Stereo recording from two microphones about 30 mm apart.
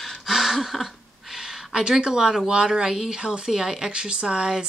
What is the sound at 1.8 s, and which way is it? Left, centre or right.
Speech, right.